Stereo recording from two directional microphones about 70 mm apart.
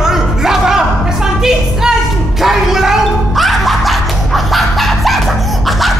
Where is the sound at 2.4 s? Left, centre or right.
Centre.